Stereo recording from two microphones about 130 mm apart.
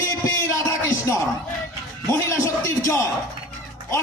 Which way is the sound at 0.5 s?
25° left (ahead or behind).